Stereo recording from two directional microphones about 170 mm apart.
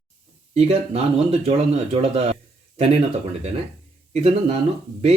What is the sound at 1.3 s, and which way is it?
Speech, 35° right (ahead or behind).